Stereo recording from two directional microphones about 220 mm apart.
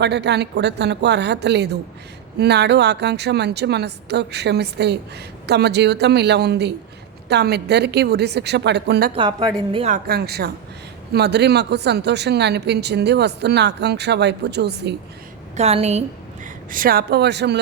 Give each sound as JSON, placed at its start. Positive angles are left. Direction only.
{"t": 0.0, "sound": "a woman's voice", "side_deg": -50}
{"t": 9.1, "sound": "a woman's voice", "side_deg": -20}
{"t": 10.1, "sound": "a woman's voice", "side_deg": -45}
{"t": 15.5, "sound": "a woman's voice", "side_deg": -30}